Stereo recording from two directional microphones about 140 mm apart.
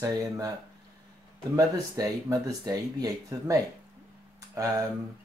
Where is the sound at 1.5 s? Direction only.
25° right (ahead or behind).